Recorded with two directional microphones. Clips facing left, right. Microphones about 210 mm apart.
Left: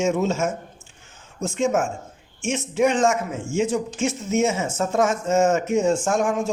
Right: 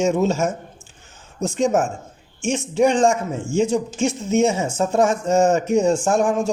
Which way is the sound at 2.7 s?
30° right (ahead or behind).